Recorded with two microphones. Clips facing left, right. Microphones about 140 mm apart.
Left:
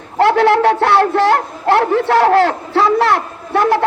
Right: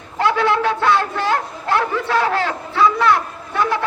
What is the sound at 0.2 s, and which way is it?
A man's voice, 80° left.